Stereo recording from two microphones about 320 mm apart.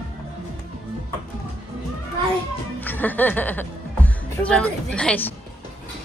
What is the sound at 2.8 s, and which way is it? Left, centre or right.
Speech, centre.